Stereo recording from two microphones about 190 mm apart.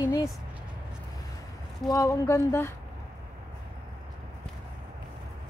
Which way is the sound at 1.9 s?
15° left (ahead or behind).